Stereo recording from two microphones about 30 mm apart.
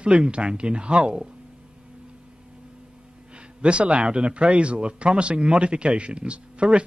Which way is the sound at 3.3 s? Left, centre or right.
Right.